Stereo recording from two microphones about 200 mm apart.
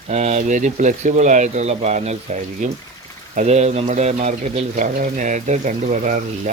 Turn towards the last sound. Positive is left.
turn(degrees=-40)  # may be behind; listen again after turning